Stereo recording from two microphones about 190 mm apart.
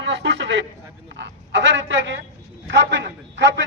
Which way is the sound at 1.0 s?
70° right (ahead or behind).